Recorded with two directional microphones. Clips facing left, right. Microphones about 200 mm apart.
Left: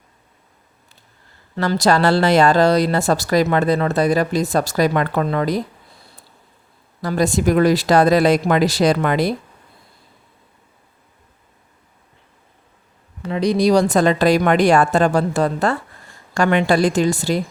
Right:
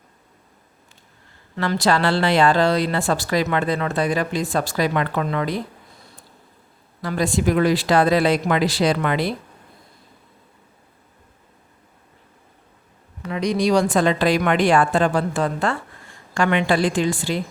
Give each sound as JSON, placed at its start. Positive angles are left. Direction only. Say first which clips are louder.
{"t": 1.5, "sound": "speech", "louder": "left 3 dB", "side_deg": 40}
{"t": 7.0, "sound": "speech", "louder": "left 3 dB", "side_deg": 40}
{"t": 13.2, "sound": "speech", "louder": "left 4 dB", "side_deg": 30}